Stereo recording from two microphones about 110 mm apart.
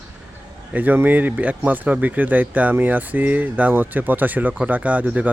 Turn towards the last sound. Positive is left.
turn(degrees=-15)  # may be behind; listen again after turning